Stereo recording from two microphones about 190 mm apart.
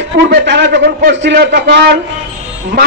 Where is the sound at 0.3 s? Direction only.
60° right (ahead or behind).